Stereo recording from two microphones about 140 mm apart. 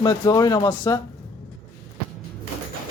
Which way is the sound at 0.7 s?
15° left (ahead or behind).